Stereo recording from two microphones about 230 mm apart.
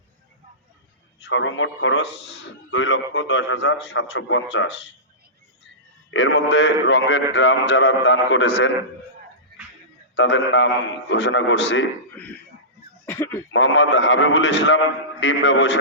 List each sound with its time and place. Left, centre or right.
1.2 s a man's voice: left
6.1 s a man's voice: left
10.2 s a man's voice: left
13.1 s a sound: centre
13.5 s a man's voice: left